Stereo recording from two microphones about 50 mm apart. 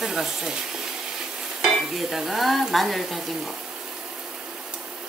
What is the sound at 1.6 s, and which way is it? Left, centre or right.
Speech, centre.